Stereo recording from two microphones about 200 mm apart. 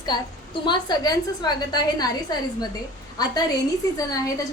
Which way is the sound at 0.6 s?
20° left (ahead or behind).